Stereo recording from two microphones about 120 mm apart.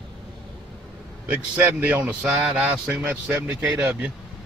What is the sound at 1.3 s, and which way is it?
Speech, 15° right (ahead or behind).